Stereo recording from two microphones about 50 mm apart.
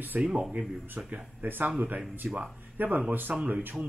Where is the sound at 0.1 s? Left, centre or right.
Right.